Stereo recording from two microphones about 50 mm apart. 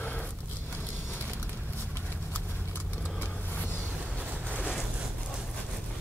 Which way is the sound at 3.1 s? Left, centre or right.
Left.